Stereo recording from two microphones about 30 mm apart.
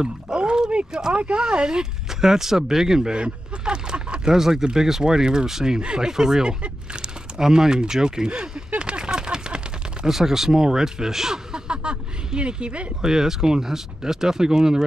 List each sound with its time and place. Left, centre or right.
0.0 s speech: right
1.1 s speech: right
1.4 s speech: right
2.0 s speech: centre
3.2 s a sound: right
4.3 s speech: centre
6.6 s speech: right
7.3 s speech: centre
8.3 s speech: right
8.7 s a sound: right
10.0 s speech: centre; by 12.8 s right
13.0 s speech: centre